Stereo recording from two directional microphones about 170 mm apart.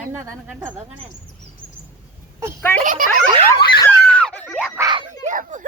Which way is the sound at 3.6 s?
25° left (ahead or behind).